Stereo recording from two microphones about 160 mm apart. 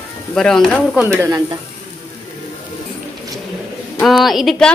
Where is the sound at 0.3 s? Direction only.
5° left (ahead or behind).